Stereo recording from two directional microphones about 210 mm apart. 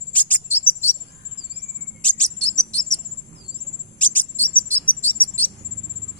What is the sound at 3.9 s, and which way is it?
Bird vocalization, 5° left (ahead or behind).